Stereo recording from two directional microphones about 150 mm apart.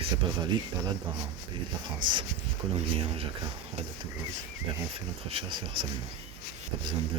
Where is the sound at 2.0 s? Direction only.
30° right (ahead or behind).